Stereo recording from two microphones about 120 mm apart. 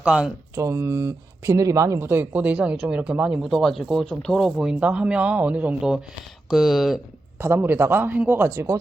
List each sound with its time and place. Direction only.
0.0 s speech: 10° right (ahead or behind)
0.5 s speech: 25° right (ahead or behind); by 7.0 s centre (ahead or behind)
7.4 s speech: 20° right (ahead or behind)